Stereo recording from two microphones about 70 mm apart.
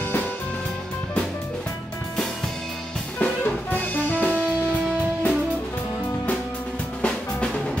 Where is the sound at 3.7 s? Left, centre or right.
Left.